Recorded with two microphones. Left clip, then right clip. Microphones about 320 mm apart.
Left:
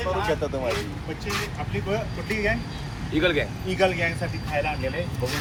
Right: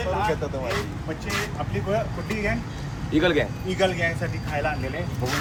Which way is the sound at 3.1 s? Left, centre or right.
Right.